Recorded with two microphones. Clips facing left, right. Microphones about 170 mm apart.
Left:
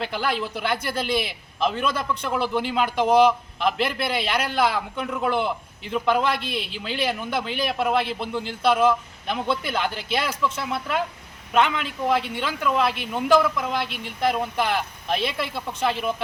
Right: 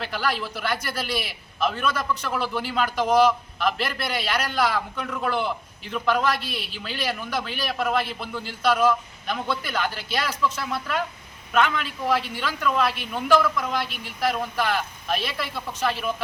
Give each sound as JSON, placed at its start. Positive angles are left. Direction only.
{"t": 0.0, "sound": "a man's voice", "side_deg": 20}